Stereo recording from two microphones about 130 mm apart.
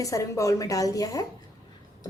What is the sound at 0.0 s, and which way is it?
A woman's voice, 25° left (ahead or behind).